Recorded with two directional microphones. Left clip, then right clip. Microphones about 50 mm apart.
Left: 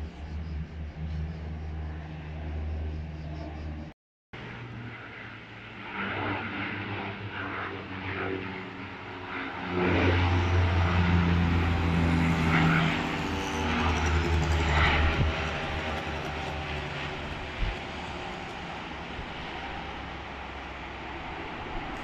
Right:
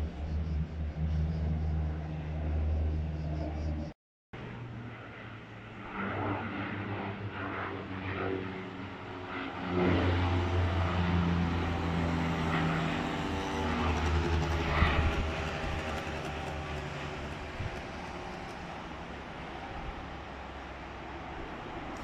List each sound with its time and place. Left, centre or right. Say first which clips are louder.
5.9 s vehicle: left 3 dB; centre
9.9 s vehicle: left 5 dB; left
10.3 s vehicle: left 4 dB; centre
13.1 s vehicle: left 3 dB; centre
13.8 s music: left 4 dB; centre
14.2 s vehicle: left 3 dB; left
14.9 s vehicle: left 5 dB; centre
15.2 s train: left 4 dB; centre
16.5 s vehicle: left 5 dB; right